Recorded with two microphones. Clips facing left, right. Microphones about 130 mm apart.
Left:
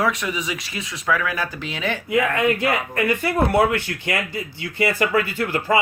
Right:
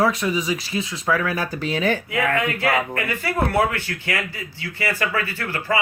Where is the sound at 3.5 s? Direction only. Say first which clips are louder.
Left 3 dB; 20° left (ahead or behind).